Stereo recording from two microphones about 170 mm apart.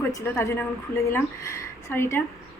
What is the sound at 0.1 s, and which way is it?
A woman's voice, 15° left (ahead or behind).